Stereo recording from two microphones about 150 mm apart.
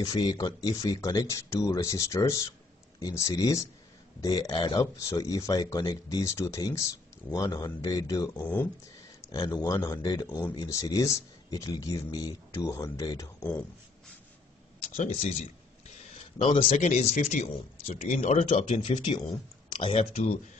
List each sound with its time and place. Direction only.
0.0 s speech: 25° left (ahead or behind)
8.4 s speech: 10° left (ahead or behind)
9.3 s speech: 25° left (ahead or behind)
13.4 s speech: 10° left (ahead or behind)
16.3 s speech: 35° left (ahead or behind)
16.7 s speech: 50° left (ahead or behind)
18.9 s speech: 35° left (ahead or behind)